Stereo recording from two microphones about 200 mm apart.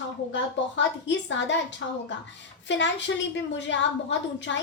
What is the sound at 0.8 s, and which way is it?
Speech, 65° left (ahead or behind).